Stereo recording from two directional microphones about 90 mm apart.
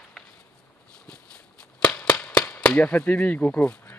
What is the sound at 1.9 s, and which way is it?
Cap gun, 15° left (ahead or behind).